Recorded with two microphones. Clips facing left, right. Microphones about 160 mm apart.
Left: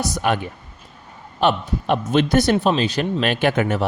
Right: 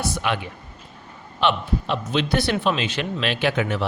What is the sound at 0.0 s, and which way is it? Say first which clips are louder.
Speech: left 4 dB; 45° left (ahead or behind).